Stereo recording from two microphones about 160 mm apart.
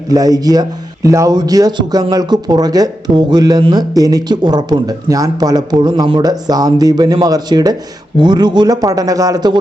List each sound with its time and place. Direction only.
0.1 s a man's voice: 25° right (ahead or behind)